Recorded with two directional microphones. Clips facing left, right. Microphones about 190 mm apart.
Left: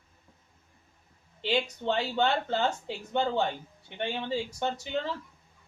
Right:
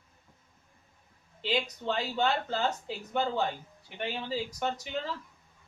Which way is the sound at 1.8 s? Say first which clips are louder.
Left 2 dB; 30° left (ahead or behind).